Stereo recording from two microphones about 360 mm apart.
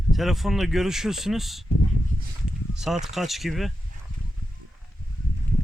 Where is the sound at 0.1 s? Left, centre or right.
Centre.